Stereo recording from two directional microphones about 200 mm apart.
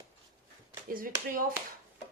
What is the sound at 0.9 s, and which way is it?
Speech, 45° right (ahead or behind).